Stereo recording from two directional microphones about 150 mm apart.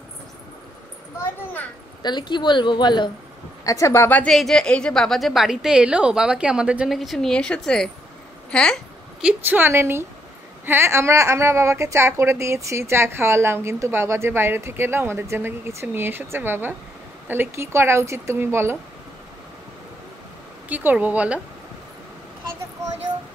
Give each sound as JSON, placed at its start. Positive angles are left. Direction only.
{"t": 2.0, "sound": "a woman's voice", "side_deg": 30}
{"t": 9.2, "sound": "a woman's voice", "side_deg": -15}
{"t": 20.6, "sound": "a woman's voice", "side_deg": -10}